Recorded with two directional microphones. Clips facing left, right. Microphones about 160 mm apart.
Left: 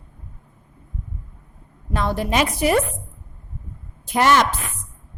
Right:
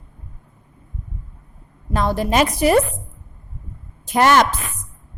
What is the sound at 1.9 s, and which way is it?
Speech, 40° right (ahead or behind).